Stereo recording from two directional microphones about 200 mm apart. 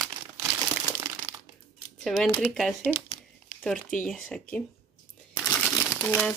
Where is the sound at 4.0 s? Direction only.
5° left (ahead or behind).